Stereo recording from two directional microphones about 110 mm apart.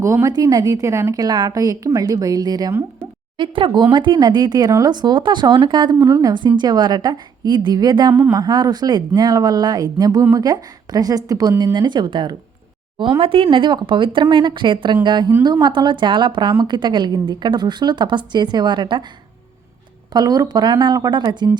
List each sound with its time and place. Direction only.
0.0 s a woman's voice: 25° right (ahead or behind)
3.3 s a woman's voice: 50° right (ahead or behind)
20.1 s a woman's voice: 35° right (ahead or behind)